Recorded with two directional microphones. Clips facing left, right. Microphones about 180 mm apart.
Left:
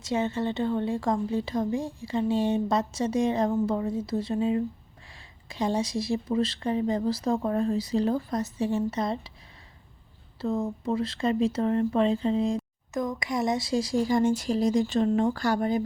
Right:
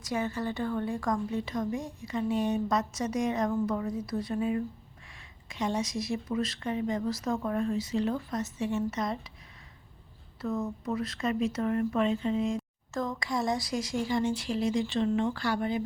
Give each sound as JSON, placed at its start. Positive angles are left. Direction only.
{"t": 0.0, "sound": "a woman's voice", "side_deg": 25}
{"t": 10.4, "sound": "speech", "side_deg": 30}
{"t": 12.9, "sound": "speech", "side_deg": 15}